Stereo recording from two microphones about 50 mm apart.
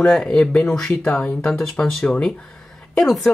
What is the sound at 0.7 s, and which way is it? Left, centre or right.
Speech, centre.